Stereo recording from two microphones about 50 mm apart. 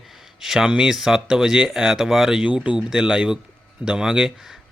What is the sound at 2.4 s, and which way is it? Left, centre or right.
Speech, right.